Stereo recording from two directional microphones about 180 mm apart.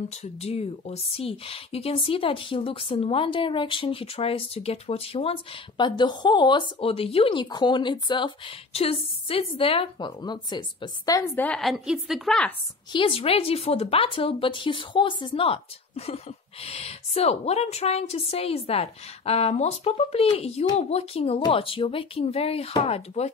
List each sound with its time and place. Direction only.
0.1 s speech: 35° left (ahead or behind); by 11.7 s 5° left (ahead or behind)
11.7 s a woman's voice: 5° right (ahead or behind)
12.9 s speech: 30° left (ahead or behind)
16.6 s speech: 35° left (ahead or behind)